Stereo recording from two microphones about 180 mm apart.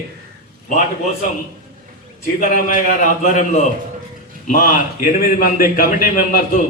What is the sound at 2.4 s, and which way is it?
A man's voice, 45° left (ahead or behind).